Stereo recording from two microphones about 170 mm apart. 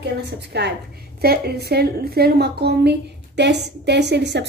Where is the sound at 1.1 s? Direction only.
70° right (ahead or behind).